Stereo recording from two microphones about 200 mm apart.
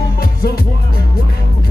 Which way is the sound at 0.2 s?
50° left (ahead or behind).